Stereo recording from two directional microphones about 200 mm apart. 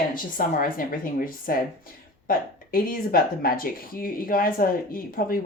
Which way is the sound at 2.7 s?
45° left (ahead or behind).